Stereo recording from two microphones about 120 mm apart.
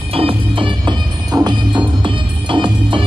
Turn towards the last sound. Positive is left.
turn(degrees=-40)  # may be behind; listen again after turning